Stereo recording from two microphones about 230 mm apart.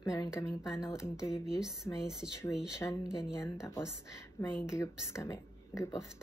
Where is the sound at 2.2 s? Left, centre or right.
Right.